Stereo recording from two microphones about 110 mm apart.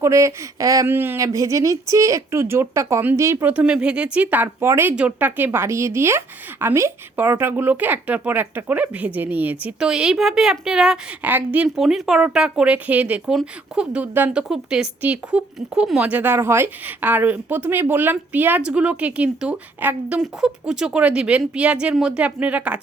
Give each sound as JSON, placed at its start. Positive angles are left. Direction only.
{"t": 0.0, "sound": "a woman's voice", "side_deg": -25}
{"t": 0.9, "sound": "a woman's voice", "side_deg": -20}
{"t": 3.5, "sound": "speech", "side_deg": -10}
{"t": 11.8, "sound": "speech", "side_deg": -5}
{"t": 14.4, "sound": "speech", "side_deg": -5}